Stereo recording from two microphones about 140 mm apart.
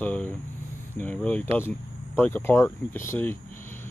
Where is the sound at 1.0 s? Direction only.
10° left (ahead or behind).